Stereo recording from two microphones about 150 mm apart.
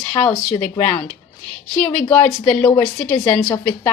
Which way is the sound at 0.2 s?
10° left (ahead or behind).